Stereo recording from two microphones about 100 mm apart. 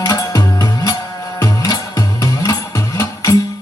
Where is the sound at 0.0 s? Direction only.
35° left (ahead or behind).